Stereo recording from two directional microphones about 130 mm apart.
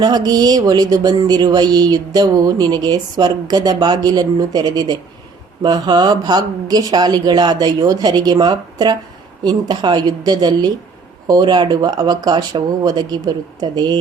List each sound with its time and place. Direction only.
0.0 s speech: 30° right (ahead or behind)